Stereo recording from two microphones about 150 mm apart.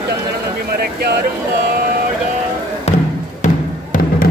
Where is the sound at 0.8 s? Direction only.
90° right.